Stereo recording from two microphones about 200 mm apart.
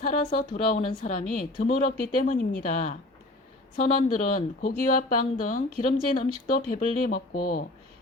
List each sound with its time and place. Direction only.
0.0 s speech: 45° left (ahead or behind)